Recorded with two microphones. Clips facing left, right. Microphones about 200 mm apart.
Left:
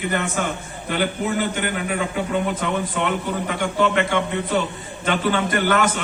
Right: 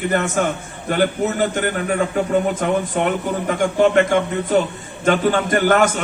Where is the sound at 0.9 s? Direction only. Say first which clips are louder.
Right 4 dB; 45° right (ahead or behind).